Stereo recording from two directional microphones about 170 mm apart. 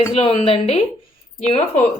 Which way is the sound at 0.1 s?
35° left (ahead or behind).